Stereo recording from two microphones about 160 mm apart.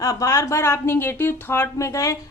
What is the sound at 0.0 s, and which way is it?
Speech, 20° left (ahead or behind).